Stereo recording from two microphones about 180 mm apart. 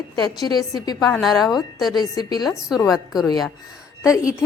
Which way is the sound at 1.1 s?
Centre (ahead or behind).